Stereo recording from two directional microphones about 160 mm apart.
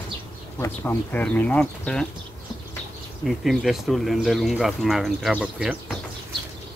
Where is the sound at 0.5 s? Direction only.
15° left (ahead or behind).